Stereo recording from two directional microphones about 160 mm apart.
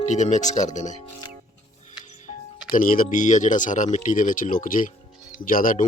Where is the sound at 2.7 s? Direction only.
55° left (ahead or behind).